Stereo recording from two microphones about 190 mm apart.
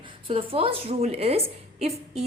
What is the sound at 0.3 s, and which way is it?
A woman's voice, 30° right (ahead or behind).